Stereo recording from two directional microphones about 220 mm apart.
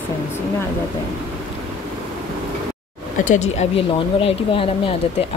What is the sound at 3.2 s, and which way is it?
Speech, 35° left (ahead or behind).